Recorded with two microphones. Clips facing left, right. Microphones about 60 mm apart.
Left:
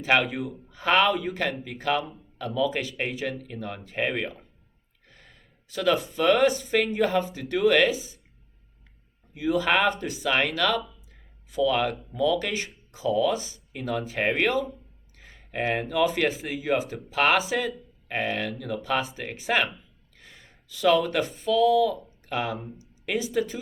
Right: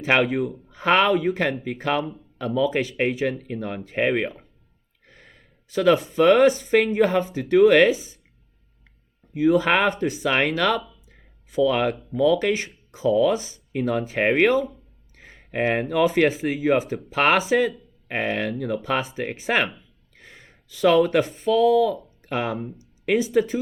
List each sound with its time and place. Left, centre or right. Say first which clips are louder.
0.0 s speech: right 3 dB; right
9.3 s speech: right 5 dB; right
15.2 s a sound: right 5 dB; right
15.9 s speech: right 5 dB; right
20.1 s gasp: right 4 dB; right
21.4 s speech: right 2 dB; right
21.8 s speech: right 3 dB; right